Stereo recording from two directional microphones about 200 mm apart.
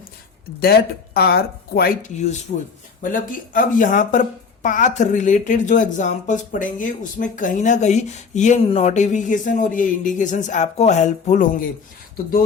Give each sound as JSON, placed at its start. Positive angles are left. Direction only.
{"t": 0.6, "sound": "speech", "side_deg": 50}